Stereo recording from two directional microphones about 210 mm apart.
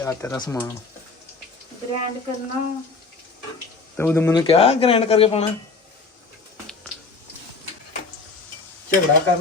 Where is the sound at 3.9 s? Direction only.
10° left (ahead or behind); by 5.5 s 30° left (ahead or behind).